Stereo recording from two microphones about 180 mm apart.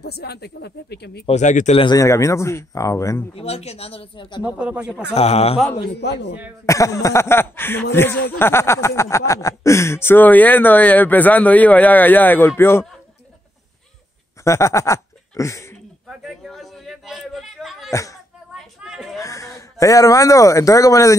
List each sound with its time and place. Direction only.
0.0 s speech: 65° left (ahead or behind)
1.2 s speech: 40° left (ahead or behind)
1.8 s speech: 20° left (ahead or behind)
3.3 s speech: 35° left (ahead or behind)
4.4 s speech: 5° right (ahead or behind)
5.1 s speech: 35° left (ahead or behind)
5.9 s a man's voice: 70° left (ahead or behind)
6.6 s speech: 15° left (ahead or behind)
14.4 s speech: 15° left (ahead or behind)
16.1 s a sound: centre (ahead or behind)
17.9 s speech: 20° left (ahead or behind)
18.8 s a sound: 5° right (ahead or behind)
19.1 s a man's voice: 15° left (ahead or behind)